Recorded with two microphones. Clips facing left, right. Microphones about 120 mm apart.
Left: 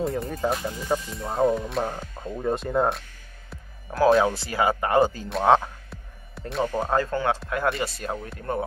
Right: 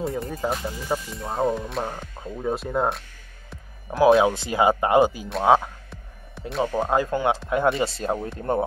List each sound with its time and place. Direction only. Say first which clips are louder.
0.0 s speech: left 1 dB; centre (ahead or behind)
4.2 s speech: right 3 dB; 20° right (ahead or behind)
5.3 s music: left 2 dB; 5° right (ahead or behind)
6.6 s speech: right 2 dB; 15° right (ahead or behind); by 8.6 s 30° right (ahead or behind)